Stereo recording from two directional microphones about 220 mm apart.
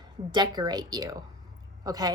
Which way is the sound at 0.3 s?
20° right (ahead or behind).